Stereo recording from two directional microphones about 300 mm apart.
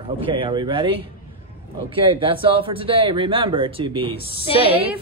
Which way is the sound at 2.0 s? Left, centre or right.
Centre.